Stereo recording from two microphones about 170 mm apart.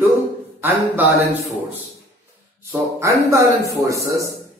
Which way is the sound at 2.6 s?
15° right (ahead or behind).